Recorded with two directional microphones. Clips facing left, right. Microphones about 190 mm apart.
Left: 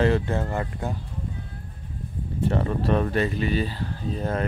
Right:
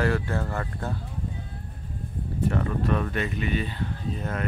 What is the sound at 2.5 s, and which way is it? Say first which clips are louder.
Speech: left 4 dB; 30° left (ahead or behind).